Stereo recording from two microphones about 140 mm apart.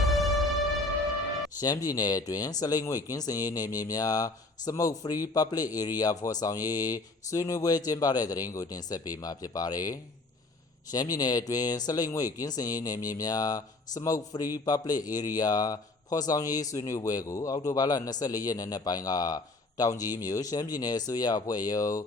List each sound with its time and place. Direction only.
1.6 s speech: 25° left (ahead or behind)